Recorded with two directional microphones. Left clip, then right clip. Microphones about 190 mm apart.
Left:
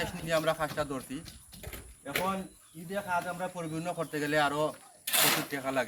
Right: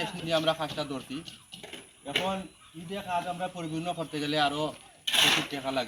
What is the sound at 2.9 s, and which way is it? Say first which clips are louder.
Speech: even; 5° left (ahead or behind).